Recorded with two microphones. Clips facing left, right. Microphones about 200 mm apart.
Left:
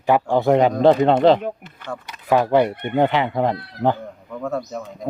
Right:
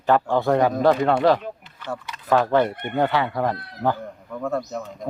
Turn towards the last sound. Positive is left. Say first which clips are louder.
# left 1 dB
turn(degrees=0)  # may be behind; listen again after turning